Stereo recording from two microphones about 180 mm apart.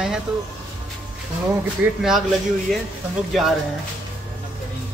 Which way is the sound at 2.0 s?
Centre (ahead or behind).